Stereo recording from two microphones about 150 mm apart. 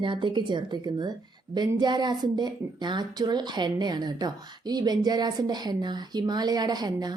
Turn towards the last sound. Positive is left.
turn(degrees=-25)  # may be behind; listen again after turning